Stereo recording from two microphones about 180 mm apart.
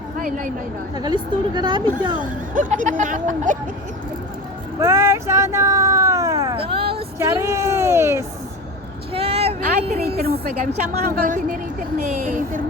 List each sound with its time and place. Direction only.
0.2 s a woman's voice: 45° right (ahead or behind)
0.9 s a woman's voice: 25° right (ahead or behind)
2.1 s speech: 45° right (ahead or behind)
4.8 s a sound: 15° right (ahead or behind); by 6.9 s 30° right (ahead or behind)
7.2 s speech: 15° right (ahead or behind)
9.1 s vehicle: 35° right (ahead or behind)
9.8 s a woman's voice: 30° right (ahead or behind)
10.2 s a woman's voice: 55° right (ahead or behind)